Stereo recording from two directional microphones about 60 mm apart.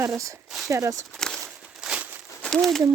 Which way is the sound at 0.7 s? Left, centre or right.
Right.